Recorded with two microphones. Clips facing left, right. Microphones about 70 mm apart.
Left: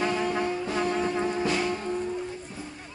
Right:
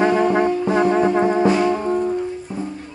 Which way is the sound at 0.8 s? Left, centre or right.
Right.